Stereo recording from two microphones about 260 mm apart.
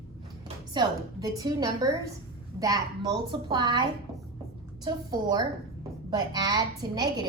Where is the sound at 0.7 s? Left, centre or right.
Centre.